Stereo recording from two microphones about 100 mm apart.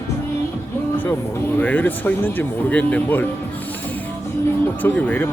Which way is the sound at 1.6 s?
15° left (ahead or behind).